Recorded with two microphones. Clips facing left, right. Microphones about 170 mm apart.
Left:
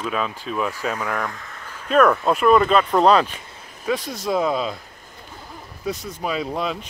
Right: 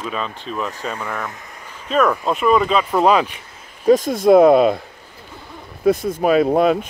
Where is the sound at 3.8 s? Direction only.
45° right (ahead or behind).